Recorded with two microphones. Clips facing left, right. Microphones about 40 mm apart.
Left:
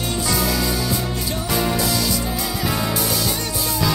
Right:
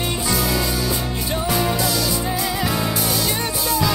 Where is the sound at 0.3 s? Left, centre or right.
Centre.